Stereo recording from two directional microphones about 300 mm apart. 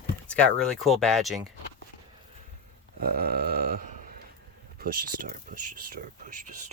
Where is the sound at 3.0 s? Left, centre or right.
Right.